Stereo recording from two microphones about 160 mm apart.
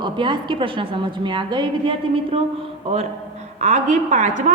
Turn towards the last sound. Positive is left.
turn(degrees=-50)  # may be behind; listen again after turning